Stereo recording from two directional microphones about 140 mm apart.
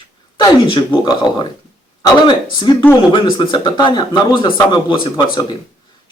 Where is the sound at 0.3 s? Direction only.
35° left (ahead or behind).